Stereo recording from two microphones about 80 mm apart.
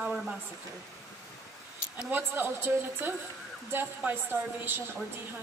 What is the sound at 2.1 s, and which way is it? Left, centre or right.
A woman's voice, right.